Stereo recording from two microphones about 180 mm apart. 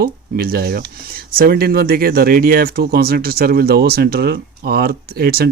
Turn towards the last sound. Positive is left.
turn(degrees=-55)  # may be behind; listen again after turning